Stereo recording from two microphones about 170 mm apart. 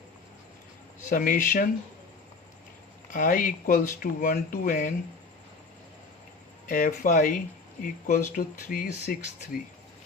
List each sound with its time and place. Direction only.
1.1 s speech: 55° left (ahead or behind)
3.1 s speech: 50° left (ahead or behind)
6.7 s speech: 50° left (ahead or behind)